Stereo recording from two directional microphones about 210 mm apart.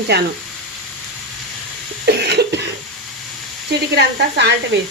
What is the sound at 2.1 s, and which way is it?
Cough, 50° right (ahead or behind).